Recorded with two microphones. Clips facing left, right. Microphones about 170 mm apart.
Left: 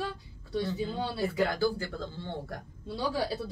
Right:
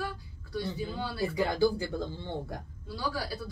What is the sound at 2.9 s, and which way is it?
Speech, 25° left (ahead or behind).